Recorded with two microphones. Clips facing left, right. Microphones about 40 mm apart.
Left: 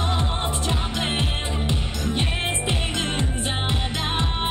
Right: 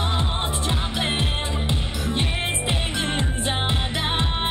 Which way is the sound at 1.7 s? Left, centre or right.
Centre.